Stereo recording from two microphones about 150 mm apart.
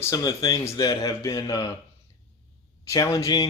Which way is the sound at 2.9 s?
25° left (ahead or behind).